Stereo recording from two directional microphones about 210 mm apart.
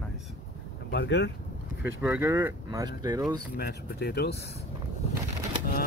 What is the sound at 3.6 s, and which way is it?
Speech, 50° left (ahead or behind).